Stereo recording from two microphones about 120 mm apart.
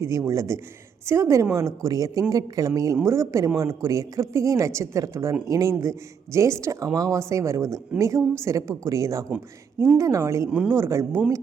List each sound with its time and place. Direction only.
0.0 s speech: 25° right (ahead or behind)
10.5 s speech: 10° right (ahead or behind)
10.8 s speech: 20° right (ahead or behind)